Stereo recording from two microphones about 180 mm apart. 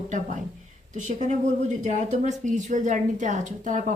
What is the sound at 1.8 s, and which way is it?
A woman's voice, 40° right (ahead or behind).